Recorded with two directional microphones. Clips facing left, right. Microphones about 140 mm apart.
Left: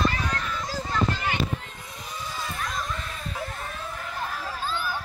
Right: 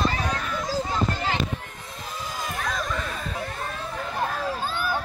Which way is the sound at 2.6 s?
85° right.